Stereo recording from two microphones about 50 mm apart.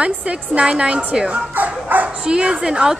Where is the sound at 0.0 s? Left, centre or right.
Right.